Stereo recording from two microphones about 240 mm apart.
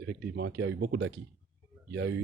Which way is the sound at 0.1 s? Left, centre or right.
Right.